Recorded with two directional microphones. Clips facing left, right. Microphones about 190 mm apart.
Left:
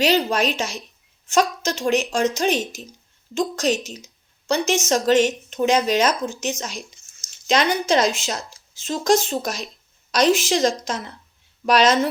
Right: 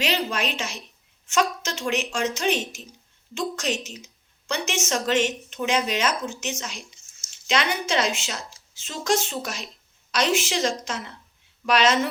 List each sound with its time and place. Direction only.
0.0 s a woman's voice: 40° left (ahead or behind)